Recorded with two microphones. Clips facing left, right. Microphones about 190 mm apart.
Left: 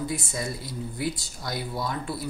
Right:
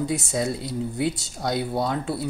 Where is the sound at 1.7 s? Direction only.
65° right (ahead or behind).